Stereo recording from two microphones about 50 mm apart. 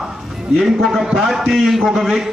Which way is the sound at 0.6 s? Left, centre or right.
Centre.